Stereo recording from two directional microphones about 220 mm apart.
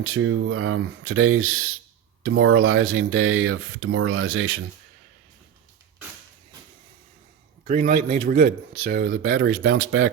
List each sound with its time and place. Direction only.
0.0 s speech: 65° right (ahead or behind)
7.7 s speech: 40° right (ahead or behind); by 10.1 s 70° right (ahead or behind)